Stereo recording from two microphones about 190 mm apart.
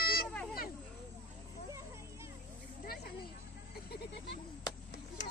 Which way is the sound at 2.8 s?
55° left (ahead or behind).